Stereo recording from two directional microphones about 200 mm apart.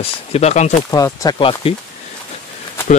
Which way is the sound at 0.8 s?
15° left (ahead or behind).